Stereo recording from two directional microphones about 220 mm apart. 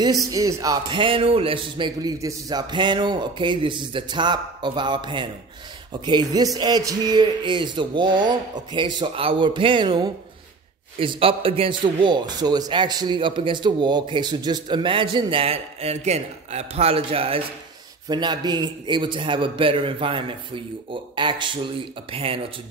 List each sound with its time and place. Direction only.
0.3 s a man's voice: 15° right (ahead or behind)